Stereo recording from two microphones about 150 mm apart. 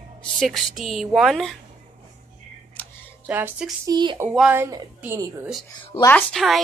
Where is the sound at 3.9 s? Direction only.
30° right (ahead or behind).